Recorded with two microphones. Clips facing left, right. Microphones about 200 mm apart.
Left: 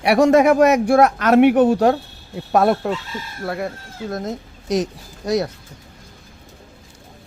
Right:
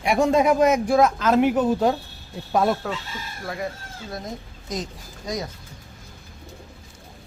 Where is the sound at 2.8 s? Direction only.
55° left (ahead or behind).